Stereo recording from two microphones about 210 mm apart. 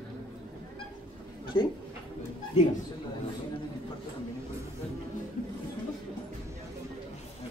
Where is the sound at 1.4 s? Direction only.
25° left (ahead or behind).